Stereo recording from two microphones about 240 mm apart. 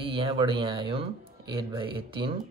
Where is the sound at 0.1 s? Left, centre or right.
Right.